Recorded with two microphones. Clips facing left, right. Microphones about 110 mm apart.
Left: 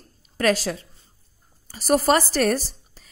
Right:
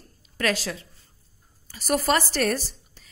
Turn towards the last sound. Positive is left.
turn(degrees=40)  # may be behind; listen again after turning